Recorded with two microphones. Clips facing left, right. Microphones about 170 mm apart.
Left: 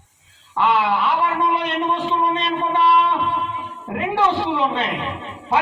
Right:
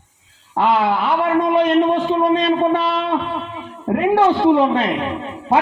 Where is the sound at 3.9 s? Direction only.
50° right (ahead or behind).